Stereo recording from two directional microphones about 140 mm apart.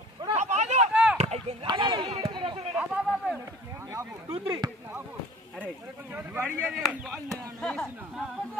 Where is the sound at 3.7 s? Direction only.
20° right (ahead or behind).